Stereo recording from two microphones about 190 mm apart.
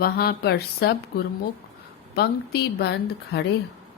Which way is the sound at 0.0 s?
55° left (ahead or behind).